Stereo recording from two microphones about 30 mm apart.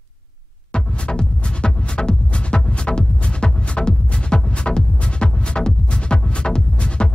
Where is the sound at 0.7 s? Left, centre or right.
Left.